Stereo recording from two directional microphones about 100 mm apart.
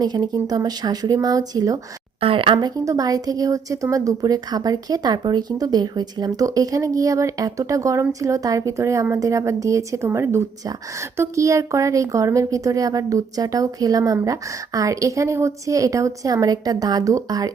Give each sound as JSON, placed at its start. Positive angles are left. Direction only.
{"t": 0.0, "sound": "speech", "side_deg": -45}
{"t": 2.2, "sound": "speech", "side_deg": -60}
{"t": 2.6, "sound": "speech", "side_deg": -40}